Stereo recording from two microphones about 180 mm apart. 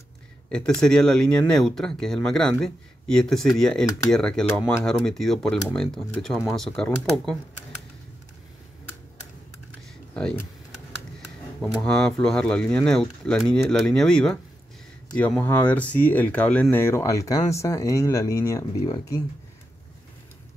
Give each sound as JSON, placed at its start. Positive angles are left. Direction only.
{"t": 0.5, "sound": "speech", "side_deg": 5}
{"t": 11.8, "sound": "speech", "side_deg": 5}